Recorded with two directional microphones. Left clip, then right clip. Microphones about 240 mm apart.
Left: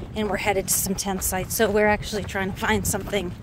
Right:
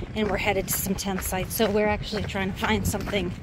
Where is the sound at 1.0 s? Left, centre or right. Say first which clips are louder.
Left 2 dB; centre.